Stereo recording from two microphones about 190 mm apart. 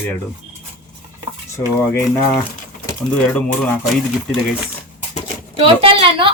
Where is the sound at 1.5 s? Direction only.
15° left (ahead or behind).